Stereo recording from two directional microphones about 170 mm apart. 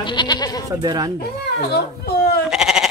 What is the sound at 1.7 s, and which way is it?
Speech, 65° left (ahead or behind).